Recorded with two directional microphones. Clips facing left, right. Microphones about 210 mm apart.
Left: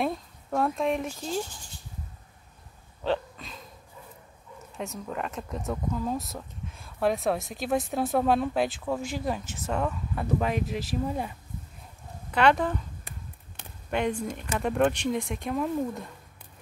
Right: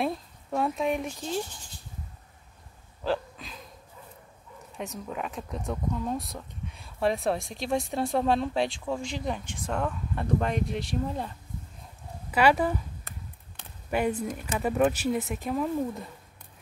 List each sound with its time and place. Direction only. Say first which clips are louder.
0.0 s speech: even; centre (ahead or behind)
3.0 s a sound: left 1 dB; centre (ahead or behind)
4.7 s speech: left 1 dB; centre (ahead or behind)
12.3 s speech: even; 5° right (ahead or behind)
13.8 s speech: right 1 dB; 5° right (ahead or behind)